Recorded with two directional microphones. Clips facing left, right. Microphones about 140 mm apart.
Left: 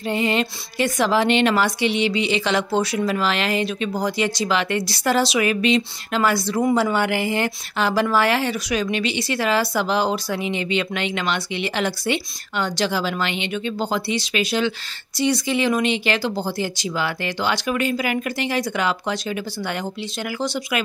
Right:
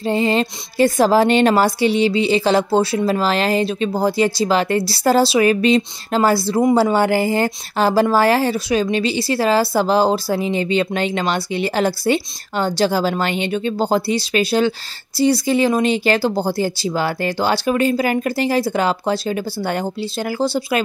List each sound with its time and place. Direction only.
0.0 s a woman's voice: 35° right (ahead or behind)